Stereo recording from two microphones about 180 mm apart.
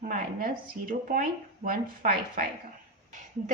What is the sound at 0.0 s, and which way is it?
A woman's voice, 50° right (ahead or behind).